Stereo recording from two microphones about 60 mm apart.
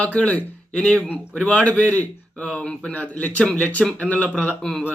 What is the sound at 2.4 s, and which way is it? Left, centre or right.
Speech, centre.